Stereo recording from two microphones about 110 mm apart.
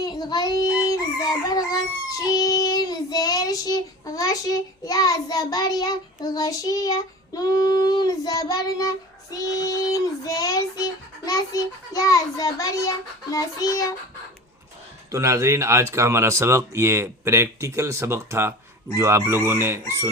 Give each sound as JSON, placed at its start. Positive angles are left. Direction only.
{"t": 0.0, "sound": "child singing", "side_deg": 35}
{"t": 15.1, "sound": "speech", "side_deg": -25}